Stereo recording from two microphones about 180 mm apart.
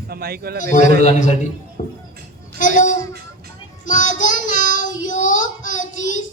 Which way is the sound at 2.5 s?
45° left (ahead or behind).